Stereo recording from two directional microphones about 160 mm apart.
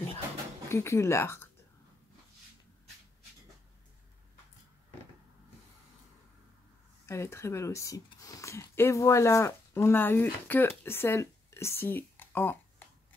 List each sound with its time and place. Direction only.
0.7 s speech: 15° left (ahead or behind)
7.1 s speech: 15° left (ahead or behind)